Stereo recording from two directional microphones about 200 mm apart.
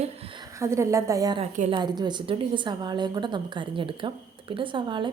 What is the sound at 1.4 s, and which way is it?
Speech, 30° right (ahead or behind).